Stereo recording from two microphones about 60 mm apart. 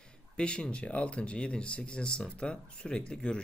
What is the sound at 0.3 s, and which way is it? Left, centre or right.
Speech, centre.